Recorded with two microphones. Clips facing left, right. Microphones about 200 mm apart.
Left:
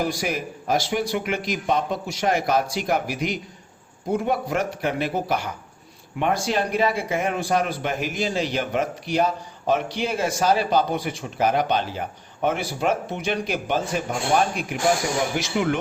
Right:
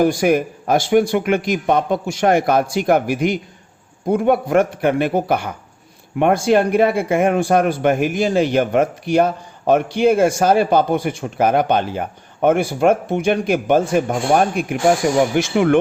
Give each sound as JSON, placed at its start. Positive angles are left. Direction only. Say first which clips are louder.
{"t": 0.0, "sound": "speech", "louder": "right 10 dB", "side_deg": -55}